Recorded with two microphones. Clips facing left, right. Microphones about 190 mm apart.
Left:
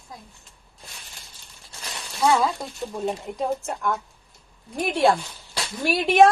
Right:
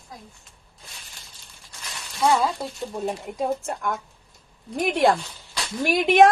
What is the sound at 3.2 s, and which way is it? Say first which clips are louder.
Speech: even; 10° right (ahead or behind).